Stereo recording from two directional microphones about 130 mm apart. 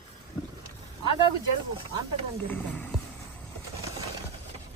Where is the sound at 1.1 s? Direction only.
40° left (ahead or behind).